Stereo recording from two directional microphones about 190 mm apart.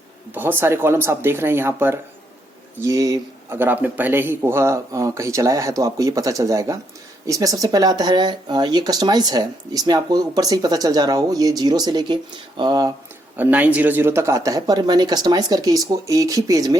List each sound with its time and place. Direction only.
0.3 s speech: 10° right (ahead or behind)
13.3 s speech: 10° right (ahead or behind)